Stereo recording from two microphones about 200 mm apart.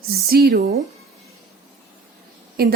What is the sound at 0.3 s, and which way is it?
Speech, 50° right (ahead or behind).